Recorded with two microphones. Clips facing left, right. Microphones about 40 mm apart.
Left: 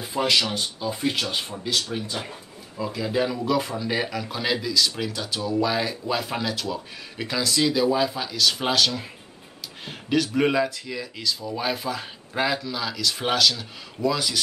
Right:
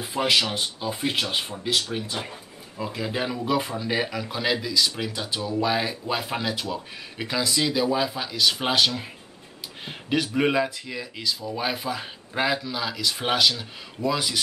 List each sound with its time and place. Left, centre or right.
0.1 s speech: centre
1.2 s speech: centre